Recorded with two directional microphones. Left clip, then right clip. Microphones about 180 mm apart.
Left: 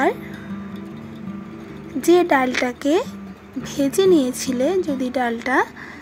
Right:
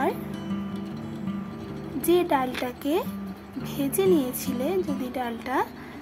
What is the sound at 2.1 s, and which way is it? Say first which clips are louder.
A woman's voice: left 7 dB; 25° left (ahead or behind).